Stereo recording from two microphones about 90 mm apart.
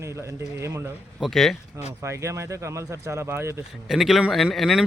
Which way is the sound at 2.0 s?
30° right (ahead or behind).